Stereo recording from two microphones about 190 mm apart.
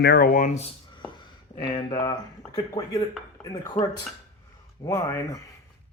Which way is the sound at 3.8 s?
40° left (ahead or behind).